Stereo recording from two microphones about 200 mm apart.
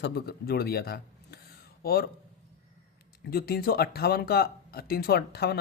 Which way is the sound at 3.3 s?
50° left (ahead or behind).